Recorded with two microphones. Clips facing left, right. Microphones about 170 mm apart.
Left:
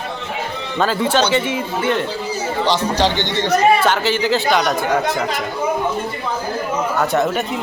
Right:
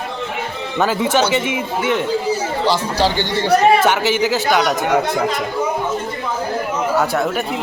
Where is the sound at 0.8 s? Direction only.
10° right (ahead or behind).